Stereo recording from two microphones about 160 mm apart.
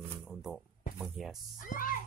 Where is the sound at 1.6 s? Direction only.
60° left (ahead or behind).